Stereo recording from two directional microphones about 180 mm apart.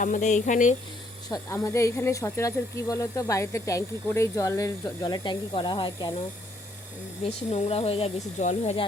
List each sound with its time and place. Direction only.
0.0 s speech: 45° left (ahead or behind)
1.3 s speech: 15° left (ahead or behind)
7.3 s speech: 35° left (ahead or behind)